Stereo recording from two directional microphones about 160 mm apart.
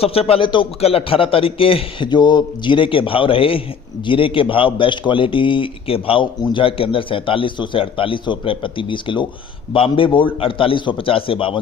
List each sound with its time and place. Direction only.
0.0 s a man's voice: 35° left (ahead or behind)